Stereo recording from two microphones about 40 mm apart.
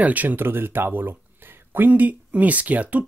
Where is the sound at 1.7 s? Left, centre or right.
Right.